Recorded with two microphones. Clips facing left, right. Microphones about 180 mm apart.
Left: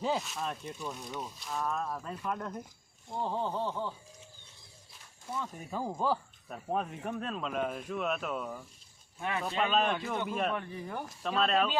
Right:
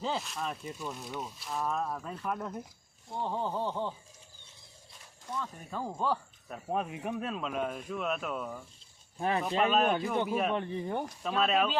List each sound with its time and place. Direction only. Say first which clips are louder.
0.0 s speech: left 2 dB; 5° left (ahead or behind)
3.6 s speech: right 1 dB; 20° right (ahead or behind)
5.4 s speech: left 1 dB; 10° left (ahead or behind)
6.7 s speech: right 1 dB; 5° right (ahead or behind)
9.1 s speech: right 5 dB; 35° right (ahead or behind)
9.6 s speech: right 2 dB; 5° right (ahead or behind)
10.5 s speech: right 5 dB; 25° right (ahead or behind)
11.1 s speech: left 1 dB; centre (ahead or behind)